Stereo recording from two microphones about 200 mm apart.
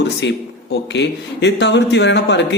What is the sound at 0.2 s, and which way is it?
Speech, 60° left (ahead or behind).